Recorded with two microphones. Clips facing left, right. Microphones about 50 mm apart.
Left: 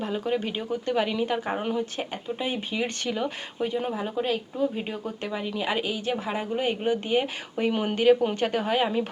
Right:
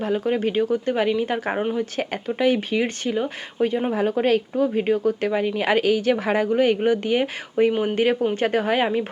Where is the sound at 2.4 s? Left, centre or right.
Right.